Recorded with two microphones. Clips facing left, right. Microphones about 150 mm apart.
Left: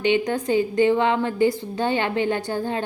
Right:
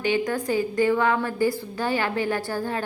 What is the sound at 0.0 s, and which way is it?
A woman's voice, 20° left (ahead or behind).